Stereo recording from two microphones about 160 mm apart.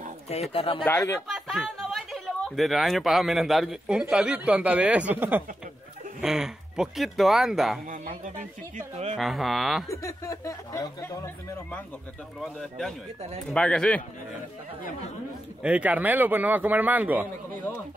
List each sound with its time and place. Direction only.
0.3 s speech: 40° left (ahead or behind)
0.8 s speech: 15° left (ahead or behind)
1.2 s a man's voice: centre (ahead or behind)
7.8 s speech: 60° right (ahead or behind)
9.1 s speech: centre (ahead or behind)
10.0 s speech: 20° left (ahead or behind)
12.4 s speech: 5° left (ahead or behind)
15.6 s a man's voice: 10° right (ahead or behind)